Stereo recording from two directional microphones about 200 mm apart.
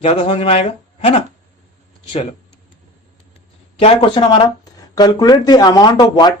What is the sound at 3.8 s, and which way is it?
Speech, 30° left (ahead or behind).